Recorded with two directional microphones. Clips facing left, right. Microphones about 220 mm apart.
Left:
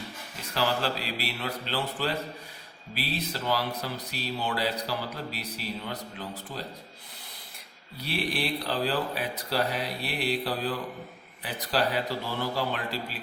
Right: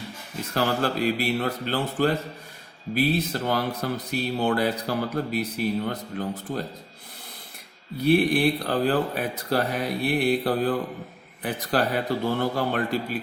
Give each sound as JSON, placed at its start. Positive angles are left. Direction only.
{"t": 0.5, "sound": "speech", "side_deg": -50}
{"t": 7.9, "sound": "speech", "side_deg": -50}